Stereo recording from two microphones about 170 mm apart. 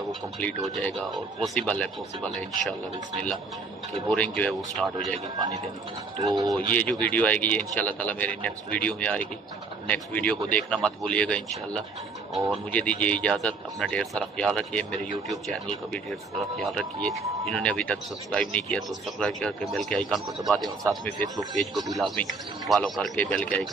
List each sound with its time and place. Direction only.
0.4 s speech: 10° left (ahead or behind)
4.1 s speech: 5° left (ahead or behind)
6.1 s speech: 25° right (ahead or behind)
6.7 s speech: 10° left (ahead or behind)